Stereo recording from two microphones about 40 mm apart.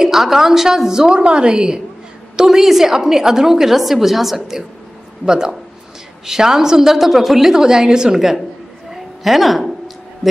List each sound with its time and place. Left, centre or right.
0.0 s a woman's voice: centre
2.3 s a woman's voice: centre
8.9 s a sound: centre